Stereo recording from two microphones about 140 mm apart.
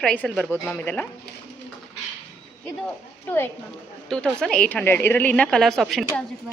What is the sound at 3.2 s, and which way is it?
Speech, 15° left (ahead or behind).